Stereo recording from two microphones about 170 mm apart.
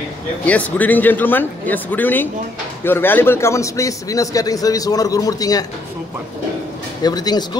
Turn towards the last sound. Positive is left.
turn(degrees=25)  # may be behind; listen again after turning